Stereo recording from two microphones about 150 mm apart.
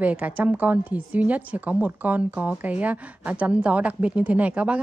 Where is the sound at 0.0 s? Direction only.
10° right (ahead or behind).